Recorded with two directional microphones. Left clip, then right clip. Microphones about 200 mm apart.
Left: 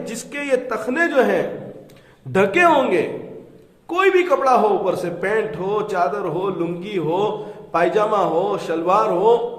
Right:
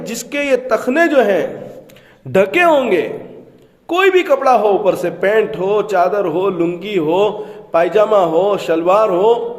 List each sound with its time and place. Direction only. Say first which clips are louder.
0.0 s a man's voice: right 7 dB; 45° right (ahead or behind)